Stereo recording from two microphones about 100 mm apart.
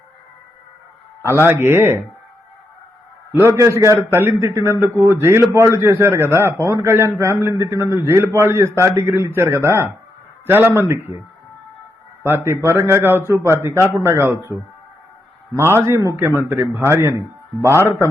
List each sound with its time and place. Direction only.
1.2 s a man's voice: 25° left (ahead or behind)
1.5 s a man's voice: 20° right (ahead or behind)
3.3 s a man's voice: 25° right (ahead or behind)
12.2 s a man's voice: 25° right (ahead or behind)
16.2 s a man's voice: 20° right (ahead or behind)
17.7 s a man's voice: 25° left (ahead or behind)